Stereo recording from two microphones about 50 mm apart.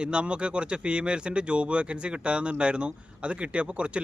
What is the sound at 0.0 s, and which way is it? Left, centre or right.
Speech, centre.